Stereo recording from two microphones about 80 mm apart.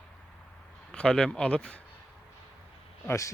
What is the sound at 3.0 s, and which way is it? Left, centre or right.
Speech, left.